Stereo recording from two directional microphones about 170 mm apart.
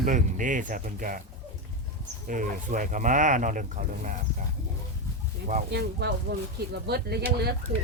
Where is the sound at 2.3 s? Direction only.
50° right (ahead or behind).